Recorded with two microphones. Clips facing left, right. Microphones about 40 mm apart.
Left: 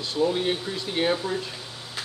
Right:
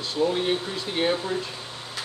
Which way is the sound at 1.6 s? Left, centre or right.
Right.